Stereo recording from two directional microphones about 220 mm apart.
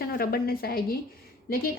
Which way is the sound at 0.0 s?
45° left (ahead or behind).